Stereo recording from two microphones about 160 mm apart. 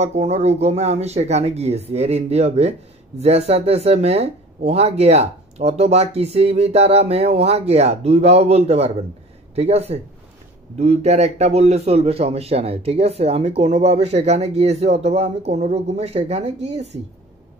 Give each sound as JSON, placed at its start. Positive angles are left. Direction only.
{"t": 0.0, "sound": "a man's voice", "side_deg": -40}